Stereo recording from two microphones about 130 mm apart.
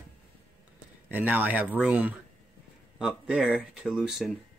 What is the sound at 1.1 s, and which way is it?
Speech, 15° right (ahead or behind).